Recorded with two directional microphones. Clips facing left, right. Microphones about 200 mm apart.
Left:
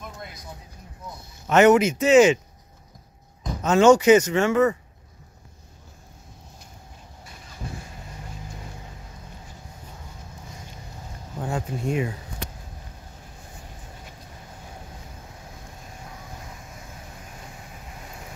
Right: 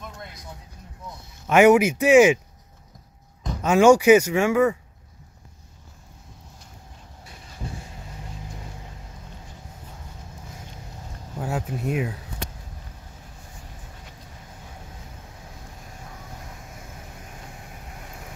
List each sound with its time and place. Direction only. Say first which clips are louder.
0.0 s a sound: left 1 dB; 5° left (ahead or behind)
1.5 s speech: right 1 dB; 10° right (ahead or behind)
3.6 s speech: even; 10° right (ahead or behind)
7.6 s vehicle: even; 30° right (ahead or behind)
11.4 s speech: even; 5° right (ahead or behind)